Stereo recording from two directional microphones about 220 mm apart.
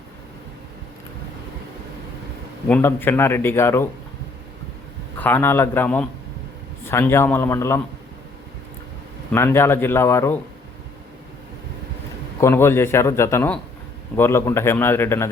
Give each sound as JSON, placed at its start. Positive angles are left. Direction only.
{"t": 2.6, "sound": "speech", "side_deg": 10}
{"t": 5.1, "sound": "speech", "side_deg": 10}
{"t": 9.3, "sound": "speech", "side_deg": 10}
{"t": 12.4, "sound": "speech", "side_deg": 10}